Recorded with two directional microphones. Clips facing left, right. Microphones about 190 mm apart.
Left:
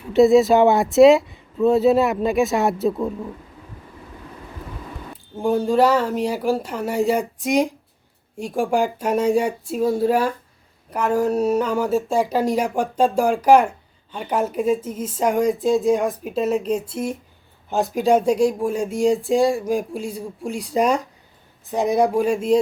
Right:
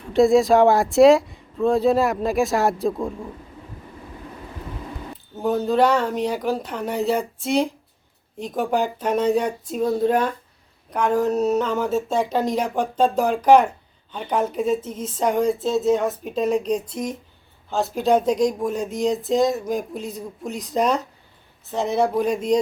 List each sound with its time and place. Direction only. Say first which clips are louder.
0.1 s speech: left 2 dB; centre (ahead or behind)
5.4 s speech: left 2 dB; 10° left (ahead or behind)